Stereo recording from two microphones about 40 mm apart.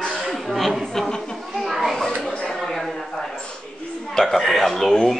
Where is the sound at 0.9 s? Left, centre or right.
Centre.